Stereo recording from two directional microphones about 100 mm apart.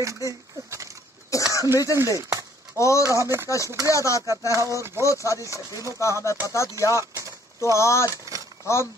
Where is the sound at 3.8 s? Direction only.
35° left (ahead or behind).